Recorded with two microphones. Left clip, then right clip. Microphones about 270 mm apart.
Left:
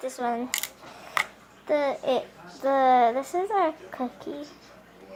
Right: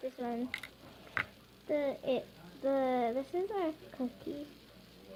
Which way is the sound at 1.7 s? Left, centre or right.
Centre.